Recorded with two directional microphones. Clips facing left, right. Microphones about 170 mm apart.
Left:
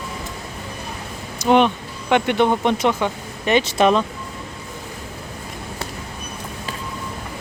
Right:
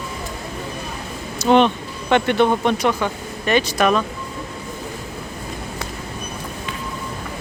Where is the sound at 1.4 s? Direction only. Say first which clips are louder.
Right 1 dB; 15° left (ahead or behind).